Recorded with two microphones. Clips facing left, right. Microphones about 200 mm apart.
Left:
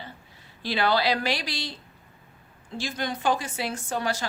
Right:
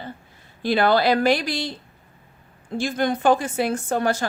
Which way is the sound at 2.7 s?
50° right (ahead or behind).